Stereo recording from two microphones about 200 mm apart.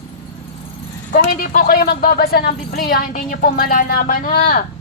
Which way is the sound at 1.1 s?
45° left (ahead or behind).